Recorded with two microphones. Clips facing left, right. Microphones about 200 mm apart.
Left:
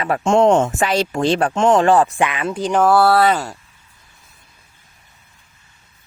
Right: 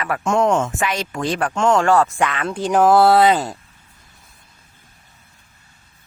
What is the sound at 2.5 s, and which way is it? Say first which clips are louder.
Speech: right 2 dB; 5° right (ahead or behind).